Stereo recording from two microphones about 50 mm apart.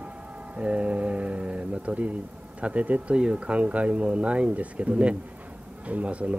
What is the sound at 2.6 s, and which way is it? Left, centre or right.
Speech, right.